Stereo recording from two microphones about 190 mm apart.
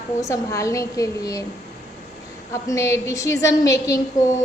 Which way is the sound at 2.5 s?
15° left (ahead or behind).